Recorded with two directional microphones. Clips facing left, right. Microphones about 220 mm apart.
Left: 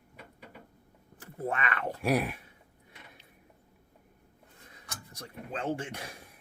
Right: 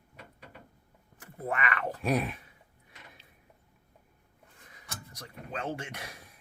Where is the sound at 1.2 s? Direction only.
30° left (ahead or behind).